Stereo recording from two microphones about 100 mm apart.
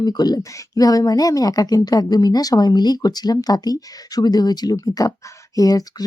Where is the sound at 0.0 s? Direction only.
40° left (ahead or behind).